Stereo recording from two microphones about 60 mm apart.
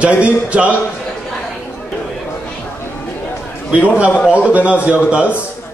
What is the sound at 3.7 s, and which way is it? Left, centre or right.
A man's voice, right.